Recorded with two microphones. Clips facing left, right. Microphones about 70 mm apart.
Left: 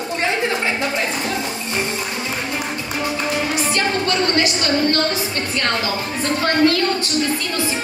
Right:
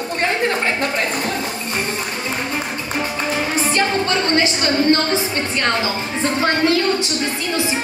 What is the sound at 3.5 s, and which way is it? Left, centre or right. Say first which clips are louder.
Music: right 2 dB; right.